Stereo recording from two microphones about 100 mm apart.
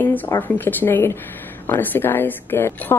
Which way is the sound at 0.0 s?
20° left (ahead or behind).